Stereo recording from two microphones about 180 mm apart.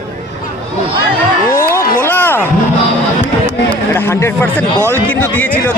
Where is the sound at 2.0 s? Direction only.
10° left (ahead or behind).